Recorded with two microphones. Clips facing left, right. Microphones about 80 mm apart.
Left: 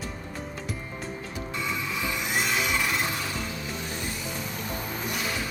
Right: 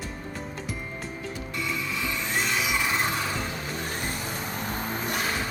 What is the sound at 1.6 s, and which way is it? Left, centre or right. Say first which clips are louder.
Music: even; centre.